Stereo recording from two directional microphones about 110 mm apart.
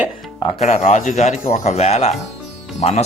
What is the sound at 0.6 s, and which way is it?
Speech, 80° left.